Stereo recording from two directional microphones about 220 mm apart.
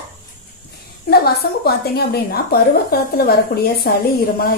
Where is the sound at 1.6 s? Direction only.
45° left (ahead or behind).